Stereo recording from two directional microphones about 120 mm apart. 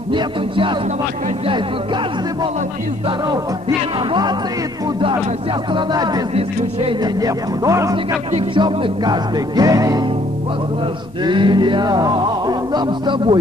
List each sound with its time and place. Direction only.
0.1 s speech: 45° right (ahead or behind)
3.3 s music: 35° right (ahead or behind)
5.8 s music: 30° right (ahead or behind)
6.3 s speech: 55° right (ahead or behind)
7.0 s speech: 30° right (ahead or behind)
8.5 s music: 40° right (ahead or behind)
11.2 s music: 40° right (ahead or behind)